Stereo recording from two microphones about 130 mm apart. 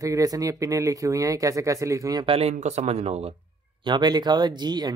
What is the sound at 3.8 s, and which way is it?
Speech, 35° right (ahead or behind).